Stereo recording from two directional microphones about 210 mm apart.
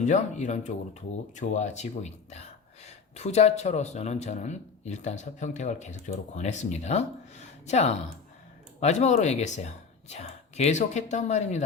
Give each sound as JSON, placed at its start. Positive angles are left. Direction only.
{"t": 0.0, "sound": "speech", "side_deg": 35}